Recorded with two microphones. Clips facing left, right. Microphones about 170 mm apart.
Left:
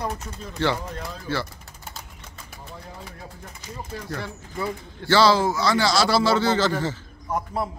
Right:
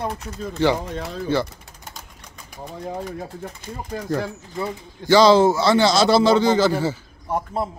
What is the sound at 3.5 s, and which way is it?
Speech, 50° right (ahead or behind).